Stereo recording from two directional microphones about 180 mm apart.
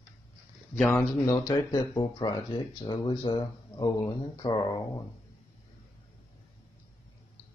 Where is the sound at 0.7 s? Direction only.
10° left (ahead or behind).